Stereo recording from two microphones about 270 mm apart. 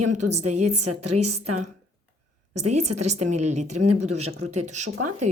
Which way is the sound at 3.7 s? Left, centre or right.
Right.